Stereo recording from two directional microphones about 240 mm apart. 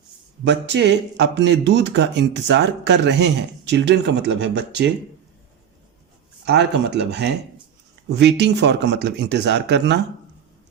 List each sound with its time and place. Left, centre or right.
0.4 s speech: right
6.4 s speech: right